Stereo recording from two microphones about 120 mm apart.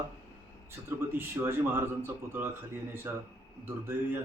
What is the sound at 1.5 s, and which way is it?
A man's voice, 20° right (ahead or behind).